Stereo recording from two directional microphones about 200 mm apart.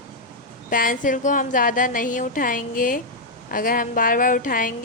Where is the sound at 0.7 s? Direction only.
45° left (ahead or behind).